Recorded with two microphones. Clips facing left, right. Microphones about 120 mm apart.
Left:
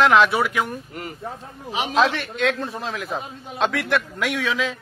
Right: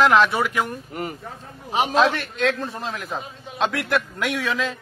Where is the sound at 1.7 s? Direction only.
40° right (ahead or behind).